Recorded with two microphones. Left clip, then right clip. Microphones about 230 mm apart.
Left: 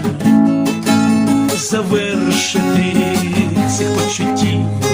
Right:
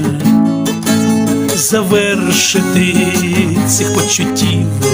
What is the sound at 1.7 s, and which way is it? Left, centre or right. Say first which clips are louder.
Music: right 8 dB; right.